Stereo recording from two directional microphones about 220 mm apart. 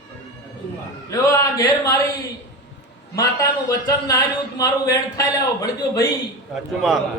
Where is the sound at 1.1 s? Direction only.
15° left (ahead or behind).